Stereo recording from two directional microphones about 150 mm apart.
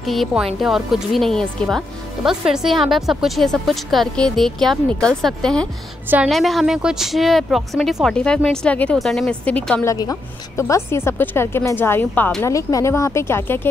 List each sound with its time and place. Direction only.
0.0 s speech: centre (ahead or behind)
6.0 s a woman's voice: 10° right (ahead or behind)
6.3 s speech: centre (ahead or behind)
9.8 s a woman's voice: 20° left (ahead or behind)
12.4 s speech: 20° left (ahead or behind)